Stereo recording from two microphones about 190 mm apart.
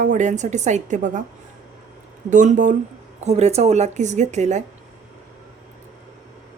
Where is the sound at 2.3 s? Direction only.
40° right (ahead or behind).